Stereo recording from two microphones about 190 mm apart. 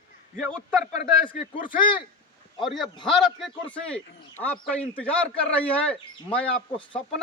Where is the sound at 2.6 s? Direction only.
Centre (ahead or behind).